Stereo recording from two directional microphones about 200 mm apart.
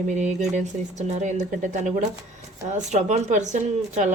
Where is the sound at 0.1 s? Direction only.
35° right (ahead or behind).